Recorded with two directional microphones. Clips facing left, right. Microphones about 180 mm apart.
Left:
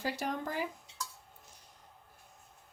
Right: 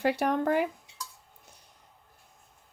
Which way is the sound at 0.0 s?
65° right (ahead or behind).